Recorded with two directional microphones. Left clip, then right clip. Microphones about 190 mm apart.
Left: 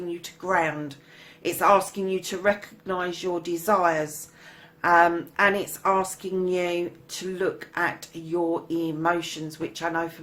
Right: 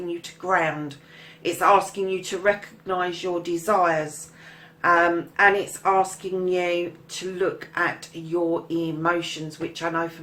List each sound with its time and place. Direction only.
0.2 s speech: 35° left (ahead or behind)